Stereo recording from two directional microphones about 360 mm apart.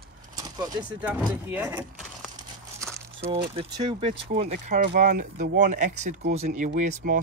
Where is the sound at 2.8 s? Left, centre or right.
Centre.